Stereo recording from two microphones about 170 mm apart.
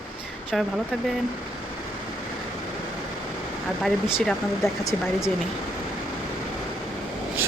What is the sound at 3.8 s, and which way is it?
Speech, centre (ahead or behind).